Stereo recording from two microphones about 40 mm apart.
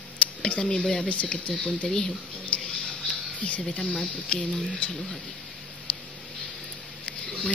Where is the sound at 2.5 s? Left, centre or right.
Left.